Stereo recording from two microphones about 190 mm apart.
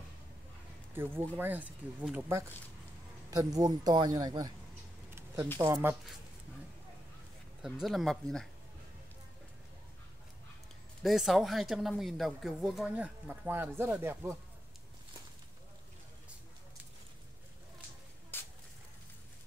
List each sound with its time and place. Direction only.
1.3 s speech: 10° right (ahead or behind)
5.1 s a sound: 15° right (ahead or behind)
5.6 s speech: 15° right (ahead or behind)
7.6 s speech: centre (ahead or behind)
11.0 s speech: centre (ahead or behind)
18.3 s a sound: 10° left (ahead or behind)